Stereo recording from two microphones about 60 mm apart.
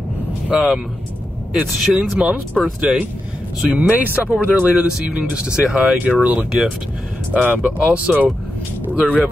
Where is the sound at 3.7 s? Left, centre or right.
Right.